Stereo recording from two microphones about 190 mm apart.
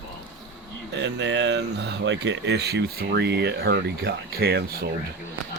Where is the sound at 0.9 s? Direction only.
70° right (ahead or behind).